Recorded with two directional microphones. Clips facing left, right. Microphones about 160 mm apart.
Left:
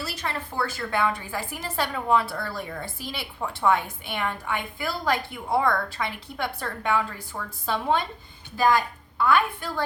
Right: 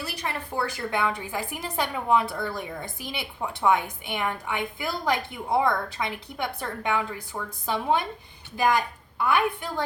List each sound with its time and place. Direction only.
0.0 s a woman's voice: 15° right (ahead or behind)